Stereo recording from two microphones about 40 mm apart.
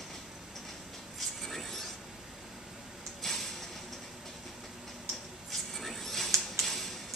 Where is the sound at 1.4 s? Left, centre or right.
Centre.